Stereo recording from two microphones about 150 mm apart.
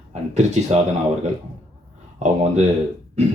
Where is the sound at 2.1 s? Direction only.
50° right (ahead or behind).